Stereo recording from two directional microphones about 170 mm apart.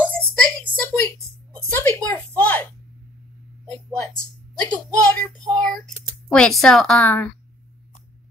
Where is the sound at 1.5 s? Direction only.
10° left (ahead or behind).